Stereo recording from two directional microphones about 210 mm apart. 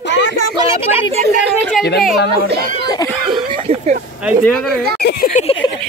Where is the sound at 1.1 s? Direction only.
30° right (ahead or behind).